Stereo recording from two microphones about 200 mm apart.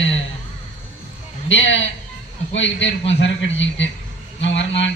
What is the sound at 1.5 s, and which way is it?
A man's voice, 65° left (ahead or behind).